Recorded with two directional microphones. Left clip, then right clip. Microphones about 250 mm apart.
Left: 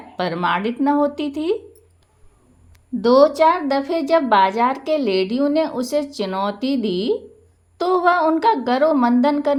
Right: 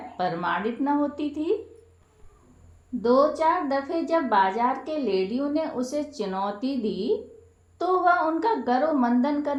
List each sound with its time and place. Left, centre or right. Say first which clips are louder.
0.2 s a woman's voice: left 6 dB; left
3.0 s a woman's voice: left 8 dB; left